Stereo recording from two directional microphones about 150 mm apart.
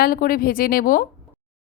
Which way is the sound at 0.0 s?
70° left (ahead or behind).